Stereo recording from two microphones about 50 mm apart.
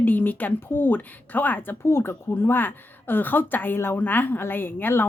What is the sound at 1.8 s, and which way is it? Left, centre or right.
A woman's voice, left.